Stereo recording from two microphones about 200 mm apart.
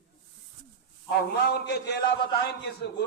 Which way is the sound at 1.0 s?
50° left (ahead or behind).